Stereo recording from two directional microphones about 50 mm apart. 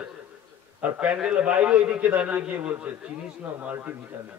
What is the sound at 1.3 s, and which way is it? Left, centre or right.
A man's voice, right.